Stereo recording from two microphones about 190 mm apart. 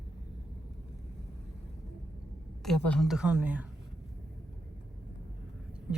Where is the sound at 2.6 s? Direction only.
5° left (ahead or behind).